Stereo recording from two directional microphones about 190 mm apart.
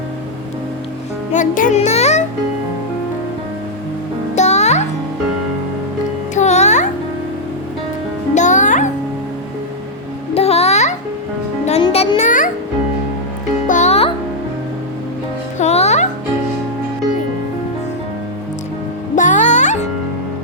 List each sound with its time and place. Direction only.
1.3 s music: 45° left (ahead or behind)
4.4 s music: 35° left (ahead or behind)
6.3 s music: 35° left (ahead or behind)
8.4 s music: 40° left (ahead or behind)
10.3 s music: 30° left (ahead or behind)
13.7 s music: 40° left (ahead or behind)
15.5 s music: 35° left (ahead or behind)
19.1 s music: 40° left (ahead or behind)